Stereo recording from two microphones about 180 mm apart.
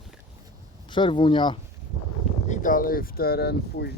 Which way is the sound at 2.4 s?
45° left (ahead or behind).